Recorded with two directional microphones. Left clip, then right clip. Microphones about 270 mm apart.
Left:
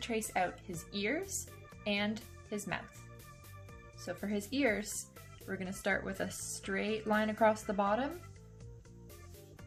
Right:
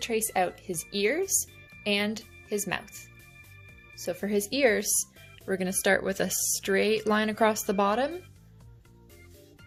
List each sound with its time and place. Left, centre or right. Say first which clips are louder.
0.0 s speech: right 7 dB; right
3.9 s speech: right 10 dB; right